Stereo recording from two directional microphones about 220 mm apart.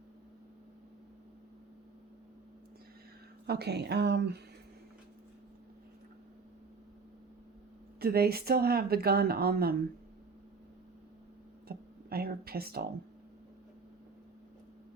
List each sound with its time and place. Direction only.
3.4 s speech: 45° right (ahead or behind)
7.9 s speech: 45° right (ahead or behind)
11.7 s music: 45° right (ahead or behind)